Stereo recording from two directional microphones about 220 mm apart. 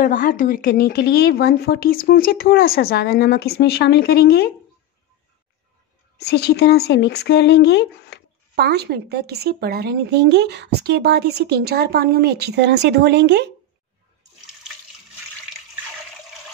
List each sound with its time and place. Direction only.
0.0 s speech: 40° left (ahead or behind)
6.1 s speech: 50° left (ahead or behind)
8.5 s speech: 45° right (ahead or behind)